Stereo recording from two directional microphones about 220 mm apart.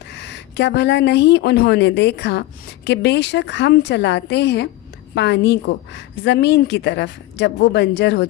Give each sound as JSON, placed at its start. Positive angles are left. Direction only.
{"t": 0.1, "sound": "speech", "side_deg": 50}